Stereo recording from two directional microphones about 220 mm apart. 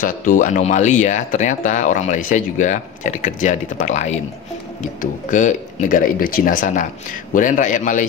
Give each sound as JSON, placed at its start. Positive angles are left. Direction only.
{"t": 0.0, "sound": "speech", "side_deg": 35}